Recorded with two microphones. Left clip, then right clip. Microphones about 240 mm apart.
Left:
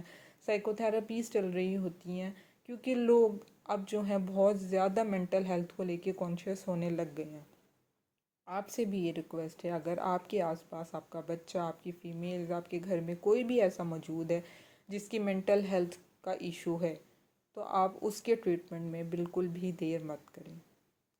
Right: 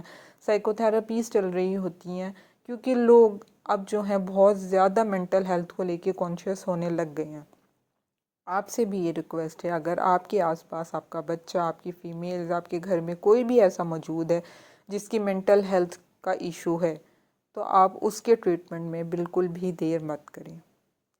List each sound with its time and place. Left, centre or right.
0.0 s speech: right
8.4 s speech: right